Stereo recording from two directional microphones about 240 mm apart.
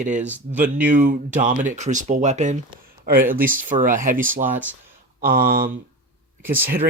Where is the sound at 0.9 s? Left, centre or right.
Right.